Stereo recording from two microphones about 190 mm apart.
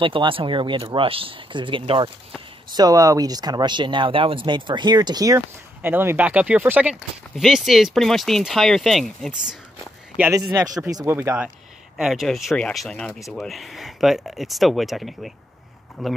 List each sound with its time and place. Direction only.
0.0 s speech: 25° right (ahead or behind); by 16.1 s centre (ahead or behind)